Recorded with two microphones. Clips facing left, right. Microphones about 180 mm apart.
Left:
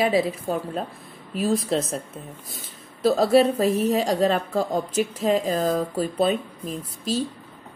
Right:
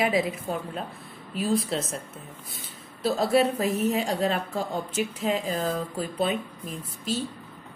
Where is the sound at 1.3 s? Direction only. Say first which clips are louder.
Left 3 dB; 40° left (ahead or behind).